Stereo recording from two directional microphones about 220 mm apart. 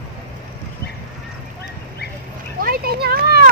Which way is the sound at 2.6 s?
40° right (ahead or behind).